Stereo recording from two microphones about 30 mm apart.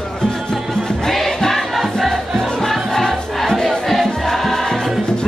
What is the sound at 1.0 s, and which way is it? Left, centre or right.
Music, centre.